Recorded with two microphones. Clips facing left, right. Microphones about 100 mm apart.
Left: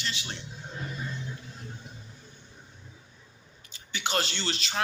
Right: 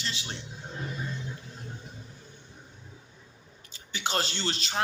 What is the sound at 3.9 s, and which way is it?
Speech, 35° right (ahead or behind).